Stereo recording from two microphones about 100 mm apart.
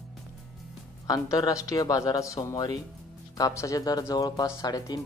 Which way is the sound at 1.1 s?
35° left (ahead or behind).